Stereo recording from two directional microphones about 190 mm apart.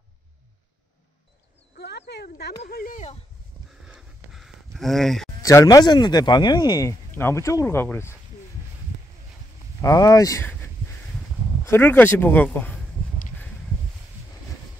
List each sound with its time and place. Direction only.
1.8 s speech: 60° left (ahead or behind)
3.8 s a sound: 5° right (ahead or behind)
5.4 s speech: 15° left (ahead or behind)
9.8 s speech: 20° left (ahead or behind)